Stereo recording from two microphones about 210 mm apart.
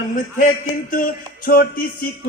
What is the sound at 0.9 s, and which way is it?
Music, 40° left (ahead or behind).